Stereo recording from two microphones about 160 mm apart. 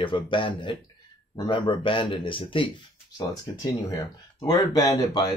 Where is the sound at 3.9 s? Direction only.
20° left (ahead or behind).